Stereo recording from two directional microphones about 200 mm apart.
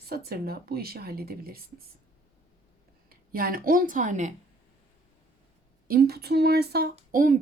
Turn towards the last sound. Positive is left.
turn(degrees=-45)  # may be behind; listen again after turning